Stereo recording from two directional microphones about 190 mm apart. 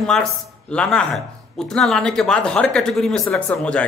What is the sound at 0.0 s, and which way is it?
Speech, 5° left (ahead or behind).